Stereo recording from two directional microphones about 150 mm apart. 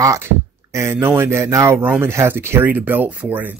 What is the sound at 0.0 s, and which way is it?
Speech, 20° right (ahead or behind).